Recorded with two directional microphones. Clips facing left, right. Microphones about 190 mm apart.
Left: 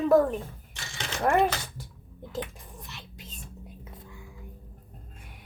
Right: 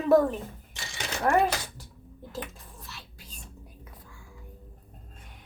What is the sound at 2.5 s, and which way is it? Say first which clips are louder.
Music: left 2 dB; 15° left (ahead or behind).